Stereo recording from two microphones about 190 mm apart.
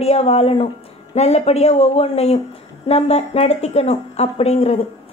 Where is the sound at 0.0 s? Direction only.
30° left (ahead or behind).